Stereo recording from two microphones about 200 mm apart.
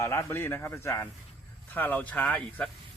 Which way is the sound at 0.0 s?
15° left (ahead or behind).